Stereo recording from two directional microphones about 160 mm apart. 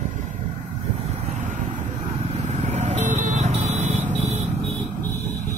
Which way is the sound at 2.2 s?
45° right (ahead or behind).